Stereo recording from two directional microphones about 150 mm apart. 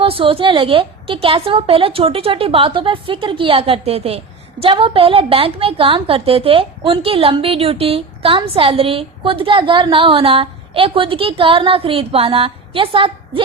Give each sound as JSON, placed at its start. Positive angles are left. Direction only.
{"t": 0.0, "sound": "a woman's voice", "side_deg": -35}